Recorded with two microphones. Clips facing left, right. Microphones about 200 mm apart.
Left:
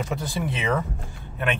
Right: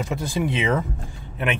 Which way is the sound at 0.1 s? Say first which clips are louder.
Right 4 dB; 15° right (ahead or behind).